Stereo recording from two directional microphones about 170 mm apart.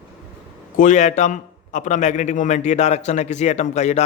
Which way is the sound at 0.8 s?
45° left (ahead or behind).